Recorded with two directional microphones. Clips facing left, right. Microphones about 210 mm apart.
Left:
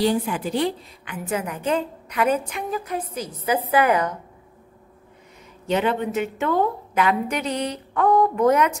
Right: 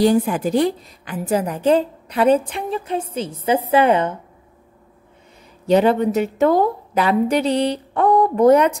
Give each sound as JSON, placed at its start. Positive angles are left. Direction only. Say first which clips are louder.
{"t": 0.0, "sound": "a woman's voice", "louder": "right 6 dB", "side_deg": -45}
{"t": 5.7, "sound": "a woman's voice", "louder": "right 7 dB", "side_deg": -35}